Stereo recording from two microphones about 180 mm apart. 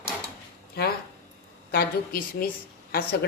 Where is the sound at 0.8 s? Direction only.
60° left (ahead or behind).